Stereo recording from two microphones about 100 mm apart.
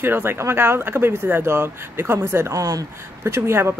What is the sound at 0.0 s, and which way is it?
Speech, 20° right (ahead or behind).